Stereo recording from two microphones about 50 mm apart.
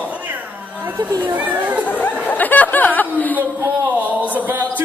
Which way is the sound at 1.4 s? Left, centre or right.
Right.